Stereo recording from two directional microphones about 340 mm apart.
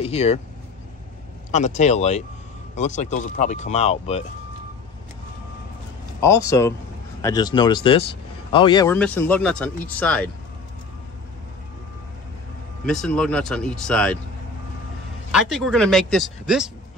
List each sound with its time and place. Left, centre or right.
0.0 s speech: centre
1.5 s speech: left
6.2 s speech: centre
12.8 s speech: centre
15.3 s speech: centre